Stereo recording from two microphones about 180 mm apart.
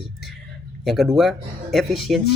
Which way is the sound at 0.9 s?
Centre (ahead or behind).